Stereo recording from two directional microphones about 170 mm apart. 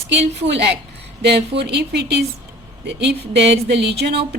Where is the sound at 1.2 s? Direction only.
80° right.